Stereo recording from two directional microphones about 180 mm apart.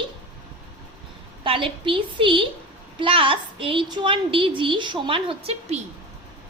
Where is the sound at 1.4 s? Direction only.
30° right (ahead or behind).